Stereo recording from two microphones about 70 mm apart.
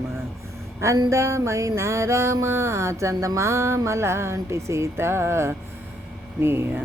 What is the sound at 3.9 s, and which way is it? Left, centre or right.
Speech, right.